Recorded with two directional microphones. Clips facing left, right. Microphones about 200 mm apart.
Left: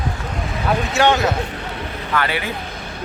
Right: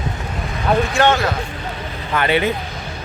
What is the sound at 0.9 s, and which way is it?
Speech, 10° left (ahead or behind).